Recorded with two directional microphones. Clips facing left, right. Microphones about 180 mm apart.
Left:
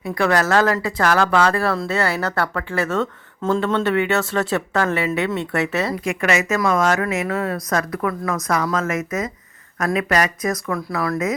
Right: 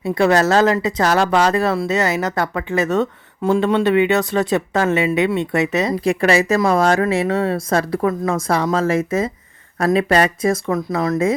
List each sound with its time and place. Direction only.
0.0 s a woman's voice: 25° right (ahead or behind)
6.1 s a woman's voice: 35° right (ahead or behind)